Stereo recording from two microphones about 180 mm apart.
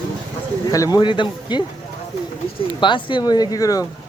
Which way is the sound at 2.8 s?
25° left (ahead or behind).